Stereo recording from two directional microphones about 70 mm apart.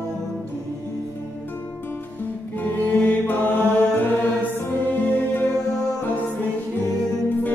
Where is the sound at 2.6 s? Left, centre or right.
Left.